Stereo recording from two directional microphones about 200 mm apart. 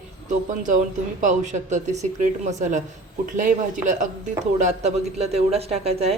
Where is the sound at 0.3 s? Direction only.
40° right (ahead or behind).